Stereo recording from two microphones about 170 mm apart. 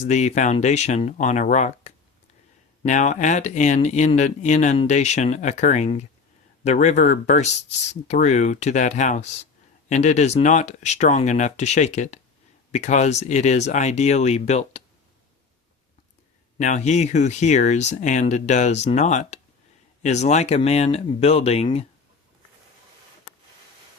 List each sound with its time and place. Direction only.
0.0 s speech: 45° left (ahead or behind)
16.6 s speech: 45° left (ahead or behind)